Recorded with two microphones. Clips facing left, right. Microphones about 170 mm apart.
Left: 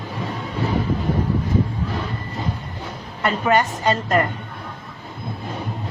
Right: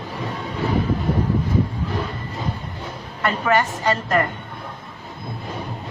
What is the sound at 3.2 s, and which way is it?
A woman's voice, 20° left (ahead or behind).